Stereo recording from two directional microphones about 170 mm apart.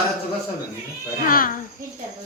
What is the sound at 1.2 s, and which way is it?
Speech, 55° left (ahead or behind).